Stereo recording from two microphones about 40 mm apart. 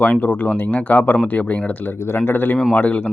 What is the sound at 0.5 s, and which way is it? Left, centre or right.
Speech, left.